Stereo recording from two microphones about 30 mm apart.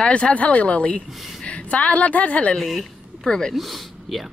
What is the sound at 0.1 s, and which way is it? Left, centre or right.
A woman's voice, left.